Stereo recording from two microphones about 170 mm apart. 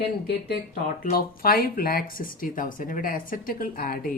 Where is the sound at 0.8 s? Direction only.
60° left (ahead or behind).